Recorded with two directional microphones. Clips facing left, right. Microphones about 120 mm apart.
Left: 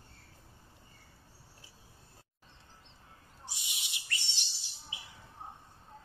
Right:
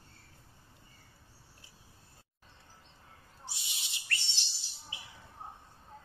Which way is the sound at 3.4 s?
15° left (ahead or behind).